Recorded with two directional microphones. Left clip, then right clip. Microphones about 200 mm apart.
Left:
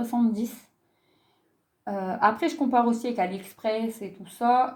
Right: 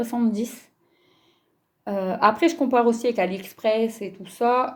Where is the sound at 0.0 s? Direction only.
35° right (ahead or behind).